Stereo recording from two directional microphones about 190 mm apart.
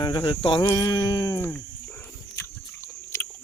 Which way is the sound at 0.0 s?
20° left (ahead or behind).